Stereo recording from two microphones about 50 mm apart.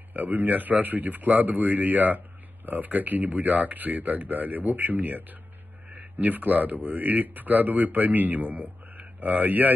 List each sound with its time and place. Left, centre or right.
0.1 s speech: right